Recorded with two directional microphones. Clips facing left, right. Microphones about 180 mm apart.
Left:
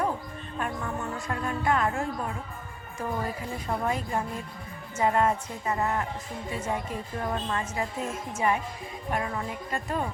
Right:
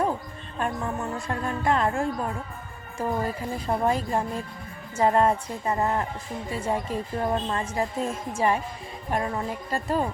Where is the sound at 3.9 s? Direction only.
35° right (ahead or behind).